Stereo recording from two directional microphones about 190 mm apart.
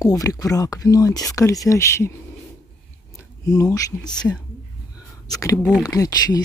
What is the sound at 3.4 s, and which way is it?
Speech, 20° left (ahead or behind).